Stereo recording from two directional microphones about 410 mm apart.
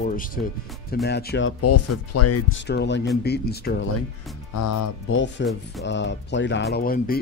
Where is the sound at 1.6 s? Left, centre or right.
Left.